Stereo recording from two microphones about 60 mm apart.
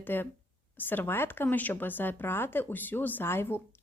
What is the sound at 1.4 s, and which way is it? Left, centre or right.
A woman's voice, left.